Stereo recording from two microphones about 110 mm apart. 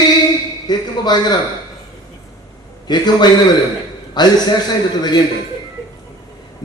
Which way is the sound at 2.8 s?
40° left (ahead or behind).